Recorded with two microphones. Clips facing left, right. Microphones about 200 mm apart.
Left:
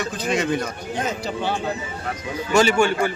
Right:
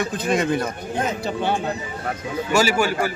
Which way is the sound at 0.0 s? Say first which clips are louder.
Right 2 dB; 50° right (ahead or behind).